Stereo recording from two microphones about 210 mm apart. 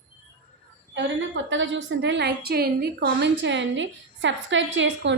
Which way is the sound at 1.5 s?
60° right (ahead or behind).